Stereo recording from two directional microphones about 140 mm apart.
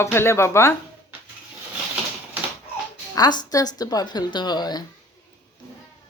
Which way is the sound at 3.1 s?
30° left (ahead or behind).